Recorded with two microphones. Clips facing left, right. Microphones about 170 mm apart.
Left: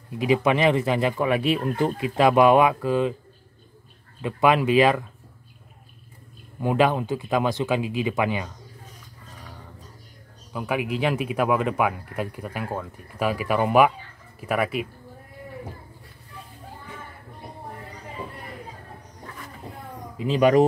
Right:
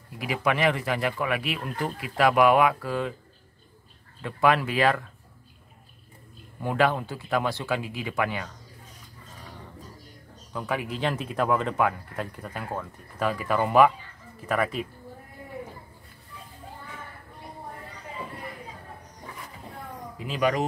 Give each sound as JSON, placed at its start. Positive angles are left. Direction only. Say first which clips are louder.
{"t": 0.2, "sound": "speech", "louder": "left 5 dB", "side_deg": 20}
{"t": 4.2, "sound": "speech", "louder": "left 3 dB", "side_deg": 15}
{"t": 6.6, "sound": "speech", "louder": "left 3 dB", "side_deg": 15}
{"t": 10.5, "sound": "speech", "louder": "left 4 dB", "side_deg": 15}
{"t": 20.2, "sound": "speech", "louder": "left 8 dB", "side_deg": 25}